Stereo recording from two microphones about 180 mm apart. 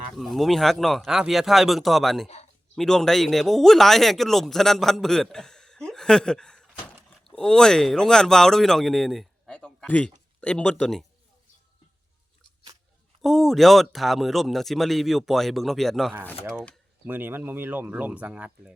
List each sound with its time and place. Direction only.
0.1 s speech: centre (ahead or behind)
2.2 s speech: 35° left (ahead or behind)
2.7 s speech: 5° left (ahead or behind)
13.2 s speech: centre (ahead or behind)
17.1 s speech: 10° right (ahead or behind)